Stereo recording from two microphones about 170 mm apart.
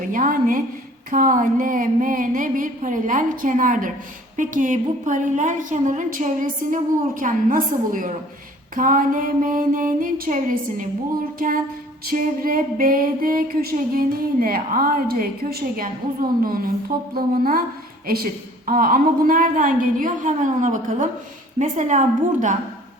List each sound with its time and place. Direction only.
0.1 s a woman's voice: 55° right (ahead or behind)
12.1 s a sound: 55° right (ahead or behind)
18.6 s a woman's voice: 55° right (ahead or behind)